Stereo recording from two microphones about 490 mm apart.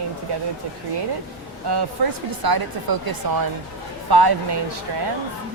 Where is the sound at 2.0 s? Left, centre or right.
Right.